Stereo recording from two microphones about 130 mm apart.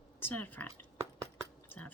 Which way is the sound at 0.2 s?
15° left (ahead or behind).